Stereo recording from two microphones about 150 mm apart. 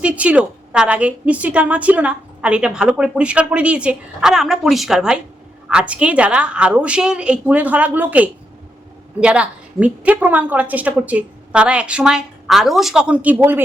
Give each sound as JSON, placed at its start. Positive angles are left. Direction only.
{"t": 0.0, "sound": "a woman's voice", "side_deg": -10}